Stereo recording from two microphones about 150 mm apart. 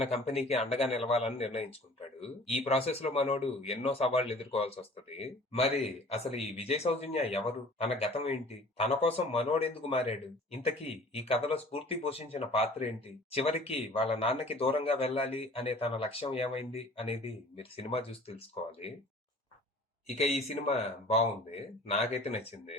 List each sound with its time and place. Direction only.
0.0 s a man's voice: 40° left (ahead or behind)
20.1 s a man's voice: 45° left (ahead or behind)